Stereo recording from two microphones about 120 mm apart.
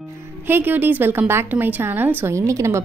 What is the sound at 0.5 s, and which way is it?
A woman's voice, 15° right (ahead or behind).